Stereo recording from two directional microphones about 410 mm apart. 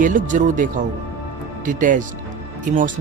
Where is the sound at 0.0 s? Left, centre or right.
Centre.